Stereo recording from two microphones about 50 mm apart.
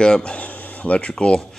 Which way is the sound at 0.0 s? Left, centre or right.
Left.